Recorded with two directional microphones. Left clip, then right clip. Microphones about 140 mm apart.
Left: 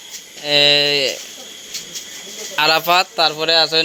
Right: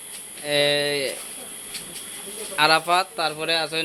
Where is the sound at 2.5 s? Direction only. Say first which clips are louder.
Left 4 dB; 45° left (ahead or behind).